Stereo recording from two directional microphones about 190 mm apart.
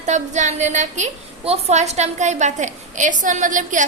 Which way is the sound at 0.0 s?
40° right (ahead or behind).